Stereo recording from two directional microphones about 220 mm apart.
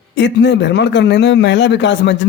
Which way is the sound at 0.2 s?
55° left (ahead or behind).